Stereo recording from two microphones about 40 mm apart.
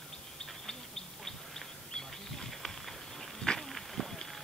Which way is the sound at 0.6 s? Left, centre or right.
Centre.